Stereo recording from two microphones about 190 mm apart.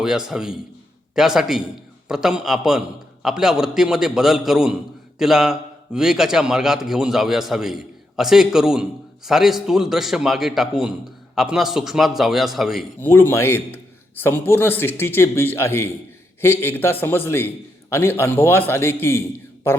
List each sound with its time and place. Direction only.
0.0 s a man's voice: 5° right (ahead or behind)
13.0 s speech: 10° left (ahead or behind)